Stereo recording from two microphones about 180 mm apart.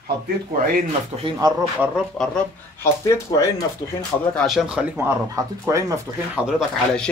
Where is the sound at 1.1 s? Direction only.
30° right (ahead or behind).